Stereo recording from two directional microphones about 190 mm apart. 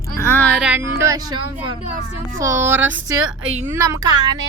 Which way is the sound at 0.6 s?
5° right (ahead or behind).